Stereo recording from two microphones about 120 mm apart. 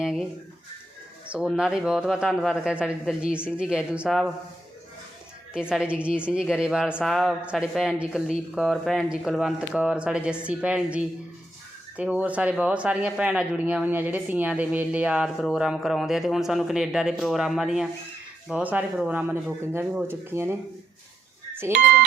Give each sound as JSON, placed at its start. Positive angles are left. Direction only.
{"t": 0.0, "sound": "speech", "side_deg": -5}
{"t": 1.3, "sound": "speech", "side_deg": -5}
{"t": 5.5, "sound": "speech", "side_deg": -5}
{"t": 19.8, "sound": "speech", "side_deg": -5}
{"t": 20.1, "sound": "speech", "side_deg": -20}
{"t": 21.6, "sound": "speech", "side_deg": -20}